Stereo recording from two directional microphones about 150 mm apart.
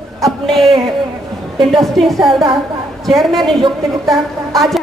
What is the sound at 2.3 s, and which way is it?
Speech, 35° right (ahead or behind).